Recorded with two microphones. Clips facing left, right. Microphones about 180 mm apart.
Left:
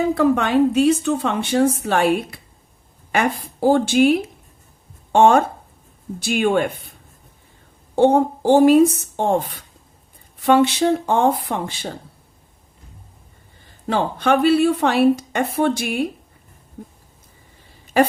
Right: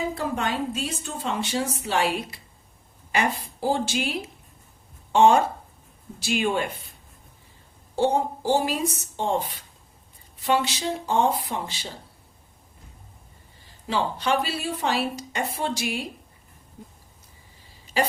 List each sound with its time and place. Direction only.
0.1 s a woman's voice: 65° left (ahead or behind)
7.9 s a woman's voice: 55° left (ahead or behind)
13.8 s a woman's voice: 55° left (ahead or behind)